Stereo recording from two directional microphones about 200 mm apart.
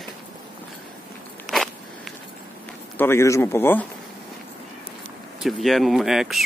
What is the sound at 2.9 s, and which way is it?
Speech, 10° left (ahead or behind).